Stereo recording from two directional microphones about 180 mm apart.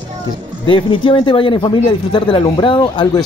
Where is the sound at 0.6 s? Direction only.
30° left (ahead or behind).